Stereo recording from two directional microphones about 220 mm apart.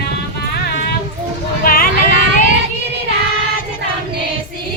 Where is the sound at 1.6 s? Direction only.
40° left (ahead or behind).